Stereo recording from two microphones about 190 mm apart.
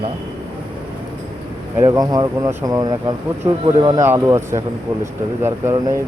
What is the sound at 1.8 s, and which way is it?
Speech, 20° right (ahead or behind).